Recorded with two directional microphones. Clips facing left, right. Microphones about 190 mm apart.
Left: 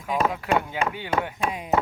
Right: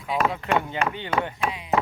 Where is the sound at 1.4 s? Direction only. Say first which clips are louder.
Left 1 dB; 45° left (ahead or behind).